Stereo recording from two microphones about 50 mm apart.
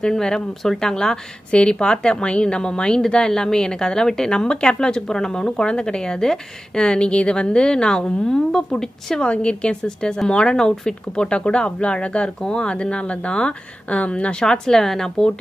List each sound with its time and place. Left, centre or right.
0.0 s a woman's voice: centre
9.2 s speech: left